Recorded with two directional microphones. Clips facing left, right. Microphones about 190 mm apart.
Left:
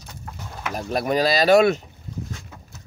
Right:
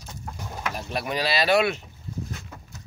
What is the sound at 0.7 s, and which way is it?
Speech, 45° left (ahead or behind).